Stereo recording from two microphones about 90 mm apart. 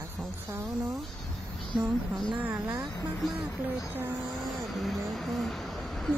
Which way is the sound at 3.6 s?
20° right (ahead or behind).